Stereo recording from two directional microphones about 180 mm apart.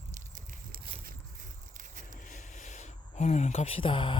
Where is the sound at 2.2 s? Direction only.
45° left (ahead or behind); by 4.2 s 25° left (ahead or behind).